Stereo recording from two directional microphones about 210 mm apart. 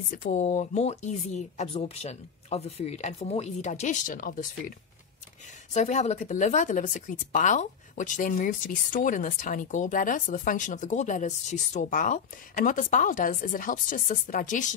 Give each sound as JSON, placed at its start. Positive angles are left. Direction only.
{"t": 0.1, "sound": "speech", "side_deg": 40}